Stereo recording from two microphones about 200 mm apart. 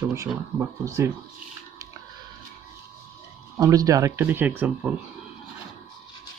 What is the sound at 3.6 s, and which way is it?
Speech, 20° right (ahead or behind).